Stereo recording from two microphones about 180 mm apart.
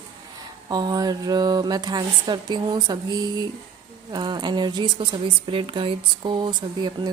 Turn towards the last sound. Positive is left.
turn(degrees=-25)  # may be behind; listen again after turning